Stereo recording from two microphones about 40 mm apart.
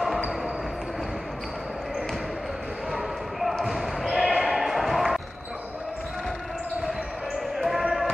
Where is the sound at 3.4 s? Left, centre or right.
Centre.